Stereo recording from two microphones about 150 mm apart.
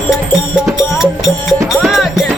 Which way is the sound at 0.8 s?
5° right (ahead or behind).